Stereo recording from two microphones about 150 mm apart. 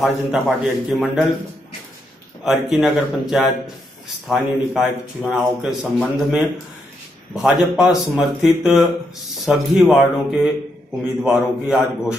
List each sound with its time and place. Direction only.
0.0 s a man's voice: centre (ahead or behind)
2.4 s a man's voice: centre (ahead or behind)
7.4 s a man's voice: 5° right (ahead or behind)